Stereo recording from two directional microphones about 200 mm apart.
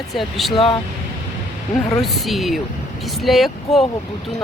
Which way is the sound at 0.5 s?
25° left (ahead or behind).